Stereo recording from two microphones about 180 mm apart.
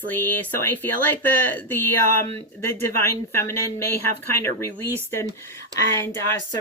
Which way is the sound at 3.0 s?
15° left (ahead or behind).